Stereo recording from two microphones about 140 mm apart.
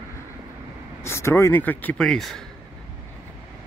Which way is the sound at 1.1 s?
20° left (ahead or behind).